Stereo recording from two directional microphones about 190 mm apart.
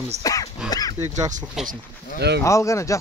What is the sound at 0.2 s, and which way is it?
Throat clearing, 15° left (ahead or behind).